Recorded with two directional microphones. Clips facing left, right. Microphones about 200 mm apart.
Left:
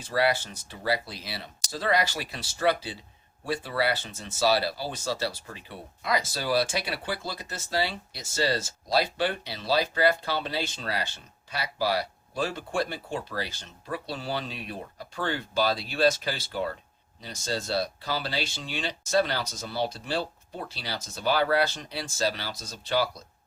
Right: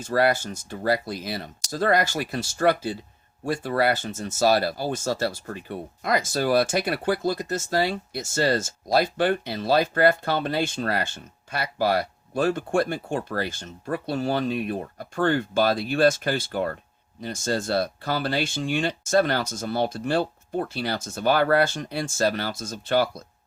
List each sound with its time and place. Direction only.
0.0 s speech: 45° right (ahead or behind)